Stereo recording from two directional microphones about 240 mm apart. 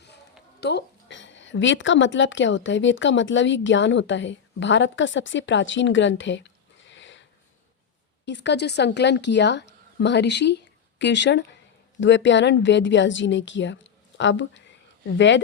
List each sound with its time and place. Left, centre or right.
0.6 s a woman's voice: left